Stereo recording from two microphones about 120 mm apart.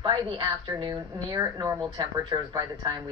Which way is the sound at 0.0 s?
35° right (ahead or behind).